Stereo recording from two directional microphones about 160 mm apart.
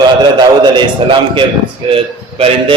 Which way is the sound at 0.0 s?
25° right (ahead or behind).